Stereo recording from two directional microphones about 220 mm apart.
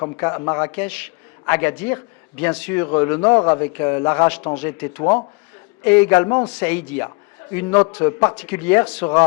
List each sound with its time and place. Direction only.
0.0 s a man's voice: 15° left (ahead or behind)
6.2 s a man's voice: 20° left (ahead or behind)
6.6 s a man's voice: 10° left (ahead or behind)